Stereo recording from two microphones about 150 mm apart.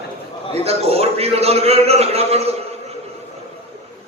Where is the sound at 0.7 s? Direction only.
40° right (ahead or behind).